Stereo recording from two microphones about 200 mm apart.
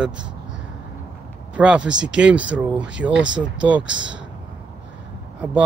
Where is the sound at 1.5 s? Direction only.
5° right (ahead or behind).